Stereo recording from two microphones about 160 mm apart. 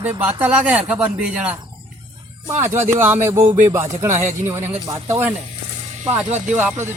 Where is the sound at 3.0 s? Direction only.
10° right (ahead or behind).